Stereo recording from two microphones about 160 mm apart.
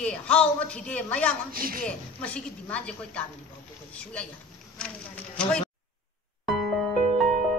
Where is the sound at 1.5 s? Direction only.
65° right (ahead or behind).